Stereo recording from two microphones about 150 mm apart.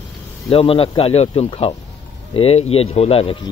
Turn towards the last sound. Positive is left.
turn(degrees=40)  # may be behind; listen again after turning